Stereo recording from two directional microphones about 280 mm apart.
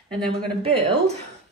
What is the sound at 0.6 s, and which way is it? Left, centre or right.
Speech, right.